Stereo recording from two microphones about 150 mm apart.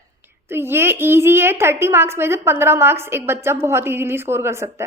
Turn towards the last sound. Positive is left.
turn(degrees=-15)  # may be behind; listen again after turning